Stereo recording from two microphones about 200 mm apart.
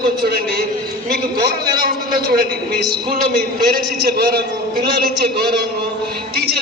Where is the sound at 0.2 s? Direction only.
50° right (ahead or behind).